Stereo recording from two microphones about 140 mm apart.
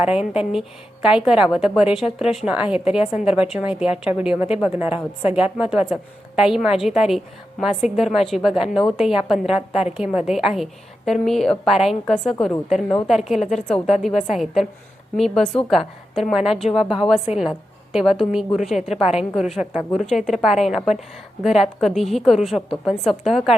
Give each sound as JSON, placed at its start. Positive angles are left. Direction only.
{"t": 0.0, "sound": "a woman's voice", "side_deg": -10}
{"t": 3.0, "sound": "a woman's voice", "side_deg": 50}
{"t": 3.5, "sound": "a woman's voice", "side_deg": -5}
{"t": 15.7, "sound": "a woman's voice", "side_deg": 0}